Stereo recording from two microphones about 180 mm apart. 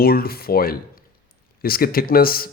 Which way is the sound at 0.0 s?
55° left (ahead or behind).